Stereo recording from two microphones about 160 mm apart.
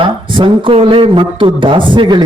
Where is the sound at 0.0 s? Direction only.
30° right (ahead or behind).